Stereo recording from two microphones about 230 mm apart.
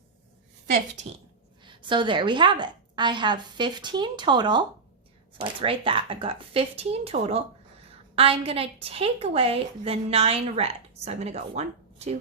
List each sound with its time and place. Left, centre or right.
1.6 s a woman's voice: right